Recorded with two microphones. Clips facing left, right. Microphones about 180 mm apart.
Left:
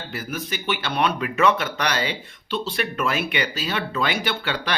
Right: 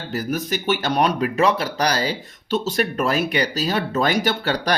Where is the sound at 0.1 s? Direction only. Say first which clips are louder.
Right 8 dB; 40° right (ahead or behind).